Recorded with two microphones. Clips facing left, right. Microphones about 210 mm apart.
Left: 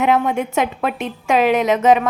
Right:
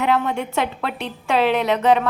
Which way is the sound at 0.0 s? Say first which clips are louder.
Left 3 dB; 20° left (ahead or behind).